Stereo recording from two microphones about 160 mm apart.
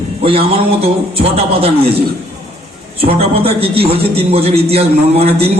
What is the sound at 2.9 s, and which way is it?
A man's voice, 35° right (ahead or behind).